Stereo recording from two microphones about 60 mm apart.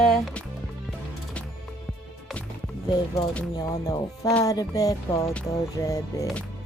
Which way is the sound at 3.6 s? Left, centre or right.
Left.